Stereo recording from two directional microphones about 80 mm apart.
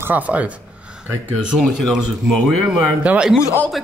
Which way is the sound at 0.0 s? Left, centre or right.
Centre.